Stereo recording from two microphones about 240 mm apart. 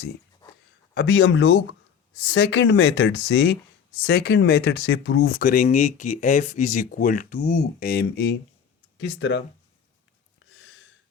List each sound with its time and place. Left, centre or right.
0.9 s speech: left